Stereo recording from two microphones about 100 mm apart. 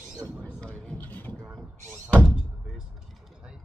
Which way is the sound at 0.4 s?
10° left (ahead or behind).